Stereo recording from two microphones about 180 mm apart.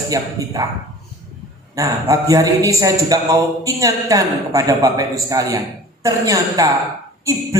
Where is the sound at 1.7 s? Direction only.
20° right (ahead or behind).